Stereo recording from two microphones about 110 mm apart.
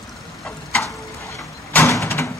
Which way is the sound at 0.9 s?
30° left (ahead or behind).